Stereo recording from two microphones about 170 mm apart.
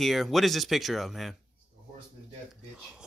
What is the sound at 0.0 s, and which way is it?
Speech, centre (ahead or behind).